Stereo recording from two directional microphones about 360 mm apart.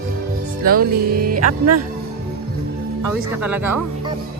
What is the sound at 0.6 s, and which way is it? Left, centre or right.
Speech, right.